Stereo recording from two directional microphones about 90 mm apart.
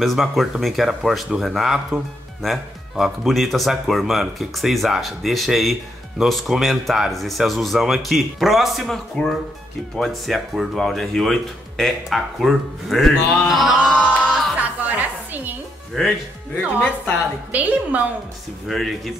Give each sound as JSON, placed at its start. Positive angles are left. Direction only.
{"t": 0.0, "sound": "speech", "side_deg": 0}
{"t": 13.7, "sound": "music", "side_deg": -10}
{"t": 15.9, "sound": "speech", "side_deg": 0}
{"t": 16.8, "sound": "a woman's voice", "side_deg": 15}
{"t": 17.5, "sound": "a woman's voice", "side_deg": -15}
{"t": 18.7, "sound": "speech", "side_deg": 0}